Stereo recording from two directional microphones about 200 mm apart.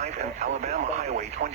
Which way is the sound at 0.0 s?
35° right (ahead or behind).